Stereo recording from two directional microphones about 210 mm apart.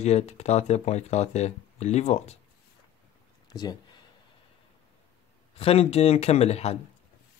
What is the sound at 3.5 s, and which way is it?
Speech, 20° left (ahead or behind).